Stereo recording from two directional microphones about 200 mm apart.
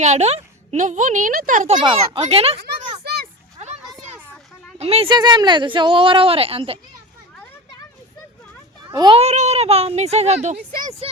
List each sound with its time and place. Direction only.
0.0 s speech: 35° right (ahead or behind)
1.8 s speech: 30° right (ahead or behind)
3.0 s children playing: 50° right (ahead or behind)
3.6 s a sound: 35° right (ahead or behind)
4.8 s speech: 30° right (ahead or behind)
8.9 s a child's voice: 20° right (ahead or behind)
9.1 s speech: 35° right (ahead or behind)